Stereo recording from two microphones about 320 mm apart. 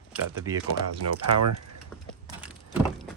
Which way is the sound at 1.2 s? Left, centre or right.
Right.